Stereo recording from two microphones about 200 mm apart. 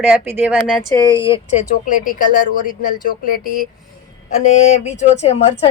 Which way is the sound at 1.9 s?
40° left (ahead or behind).